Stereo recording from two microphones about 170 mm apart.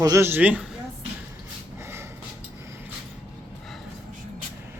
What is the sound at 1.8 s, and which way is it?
Snort, 15° right (ahead or behind).